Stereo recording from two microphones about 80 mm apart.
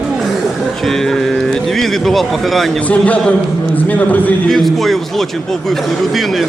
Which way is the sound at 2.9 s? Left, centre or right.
Centre.